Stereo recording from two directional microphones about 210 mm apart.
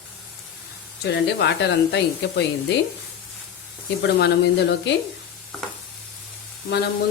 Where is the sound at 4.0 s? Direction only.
55° left (ahead or behind).